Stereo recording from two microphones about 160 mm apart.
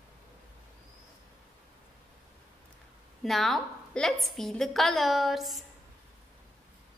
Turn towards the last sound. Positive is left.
turn(degrees=0)  # may be behind; listen again after turning